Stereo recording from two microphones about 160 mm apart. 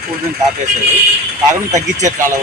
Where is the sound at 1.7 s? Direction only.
50° right (ahead or behind).